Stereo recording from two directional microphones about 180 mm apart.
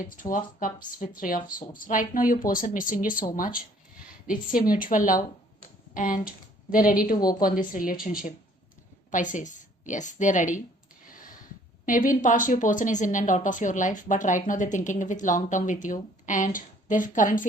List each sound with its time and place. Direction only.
0.0 s a woman's voice: 50° left (ahead or behind)
9.1 s speech: 45° left (ahead or behind)
11.0 s a sound: 50° left (ahead or behind)
11.9 s speech: 45° left (ahead or behind)